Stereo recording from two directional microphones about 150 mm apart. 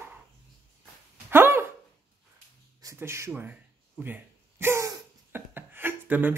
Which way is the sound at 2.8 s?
20° right (ahead or behind).